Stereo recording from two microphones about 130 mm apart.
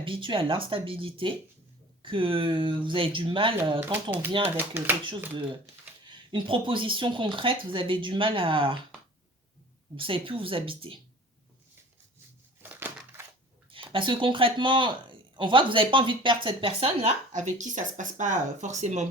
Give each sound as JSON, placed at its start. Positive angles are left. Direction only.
{"t": 0.0, "sound": "speech", "side_deg": -40}
{"t": 4.5, "sound": "speech", "side_deg": -15}
{"t": 6.3, "sound": "speech", "side_deg": -40}
{"t": 9.9, "sound": "speech", "side_deg": -40}
{"t": 12.6, "sound": "crushing", "side_deg": -15}
{"t": 13.7, "sound": "speech", "side_deg": -45}